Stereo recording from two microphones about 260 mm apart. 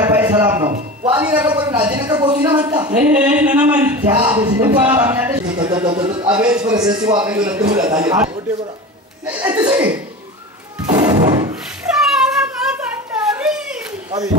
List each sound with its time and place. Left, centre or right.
0.2 s a man's voice: centre
0.7 s a man's voice: right
1.1 s a man's voice: centre
6.2 s speech: centre
10.9 s music: centre
12.0 s a sound: centre